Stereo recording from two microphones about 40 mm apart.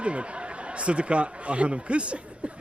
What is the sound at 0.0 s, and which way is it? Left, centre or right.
Speech, right.